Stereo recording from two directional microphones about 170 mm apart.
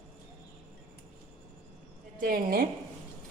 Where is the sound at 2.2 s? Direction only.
60° right (ahead or behind).